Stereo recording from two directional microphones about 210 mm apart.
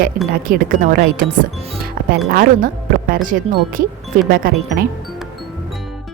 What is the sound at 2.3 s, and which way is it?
A woman's voice, 45° right (ahead or behind).